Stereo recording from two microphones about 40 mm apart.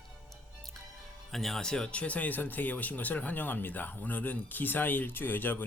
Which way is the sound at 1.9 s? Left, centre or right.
Left.